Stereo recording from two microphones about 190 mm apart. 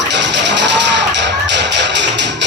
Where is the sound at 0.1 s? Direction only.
65° right (ahead or behind).